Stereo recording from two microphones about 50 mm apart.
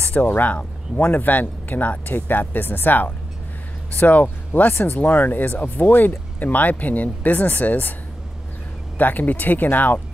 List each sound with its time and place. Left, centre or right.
0.2 s speech: left
8.9 s speech: left